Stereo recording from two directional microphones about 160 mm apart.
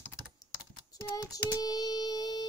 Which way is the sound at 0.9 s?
20° left (ahead or behind).